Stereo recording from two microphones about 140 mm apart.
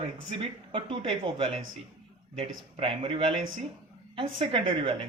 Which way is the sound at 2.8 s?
40° right (ahead or behind).